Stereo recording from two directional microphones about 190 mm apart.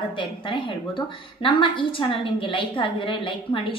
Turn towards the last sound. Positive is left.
turn(degrees=25)  # may be behind; listen again after turning